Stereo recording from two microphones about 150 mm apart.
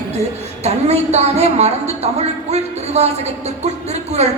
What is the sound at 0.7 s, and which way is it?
A woman's voice, 45° right (ahead or behind).